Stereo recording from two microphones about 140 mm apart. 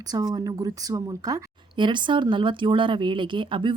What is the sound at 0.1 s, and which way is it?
Speech, 30° right (ahead or behind).